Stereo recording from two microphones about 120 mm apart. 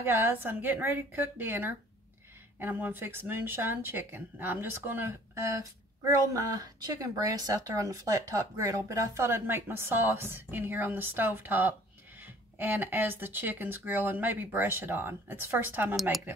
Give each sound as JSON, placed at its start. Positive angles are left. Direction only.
{"t": 0.0, "sound": "a woman's voice", "side_deg": -20}